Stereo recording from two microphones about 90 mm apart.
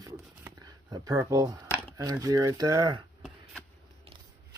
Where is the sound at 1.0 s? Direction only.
40° right (ahead or behind).